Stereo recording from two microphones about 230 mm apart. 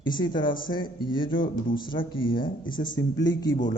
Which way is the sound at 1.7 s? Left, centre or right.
Left.